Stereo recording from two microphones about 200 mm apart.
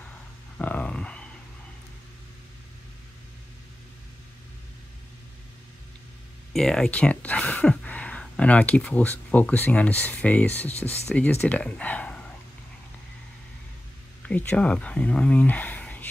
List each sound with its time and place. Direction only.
0.6 s a sound: 5° left (ahead or behind)
6.5 s speech: centre (ahead or behind)
10.7 s speech: 30° left (ahead or behind)
11.1 s speech: 5° left (ahead or behind)
14.2 s speech: 5° left (ahead or behind)